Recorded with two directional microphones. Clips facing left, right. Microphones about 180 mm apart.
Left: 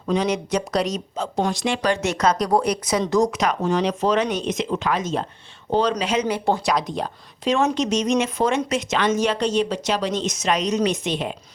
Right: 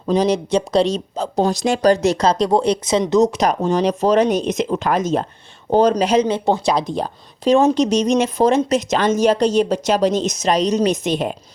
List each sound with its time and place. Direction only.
0.0 s speech: 35° right (ahead or behind)
3.4 s speech: 35° right (ahead or behind)
6.2 s speech: 20° right (ahead or behind); by 11.3 s 45° right (ahead or behind)